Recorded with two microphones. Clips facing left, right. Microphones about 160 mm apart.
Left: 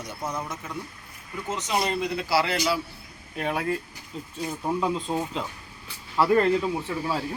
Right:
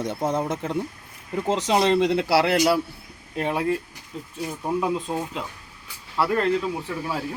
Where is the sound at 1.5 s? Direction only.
85° right; by 2.8 s 60° right (ahead or behind).